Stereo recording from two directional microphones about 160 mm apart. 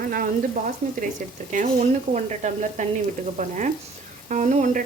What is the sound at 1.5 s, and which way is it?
Speech, 45° right (ahead or behind).